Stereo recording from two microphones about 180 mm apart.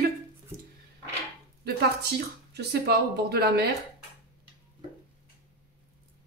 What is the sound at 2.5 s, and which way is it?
Speech, 65° right (ahead or behind).